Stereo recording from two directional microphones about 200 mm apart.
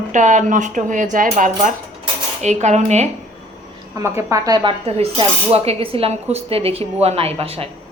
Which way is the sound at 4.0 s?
15° right (ahead or behind).